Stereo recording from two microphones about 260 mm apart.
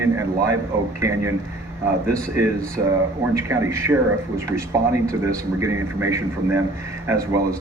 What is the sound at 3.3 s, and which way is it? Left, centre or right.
A man's voice, centre.